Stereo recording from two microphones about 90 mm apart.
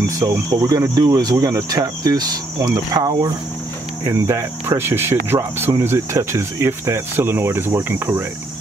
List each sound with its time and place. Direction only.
0.0 s speech: 40° right (ahead or behind)
3.0 s speech: 50° right (ahead or behind)
4.0 s speech: 35° right (ahead or behind)